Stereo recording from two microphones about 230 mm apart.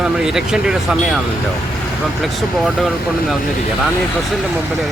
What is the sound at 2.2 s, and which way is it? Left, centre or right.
Speech, centre.